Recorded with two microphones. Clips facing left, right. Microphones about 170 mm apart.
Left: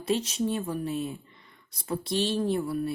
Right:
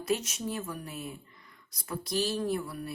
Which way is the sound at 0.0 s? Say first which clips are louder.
Left 4 dB; 30° left (ahead or behind).